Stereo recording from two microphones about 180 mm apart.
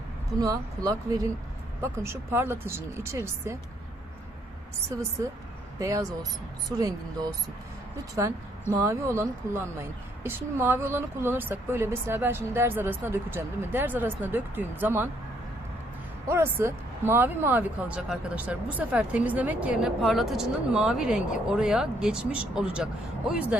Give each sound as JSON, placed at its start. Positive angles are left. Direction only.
{"t": 0.3, "sound": "speech", "side_deg": -20}
{"t": 5.8, "sound": "speech", "side_deg": -20}
{"t": 8.7, "sound": "speech", "side_deg": -15}
{"t": 16.3, "sound": "speech", "side_deg": -15}